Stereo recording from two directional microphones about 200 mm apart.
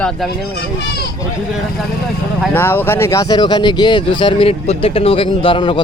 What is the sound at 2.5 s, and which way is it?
Speech, 10° left (ahead or behind).